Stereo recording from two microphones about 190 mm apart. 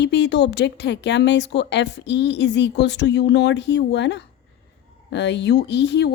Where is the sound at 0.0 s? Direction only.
65° left (ahead or behind).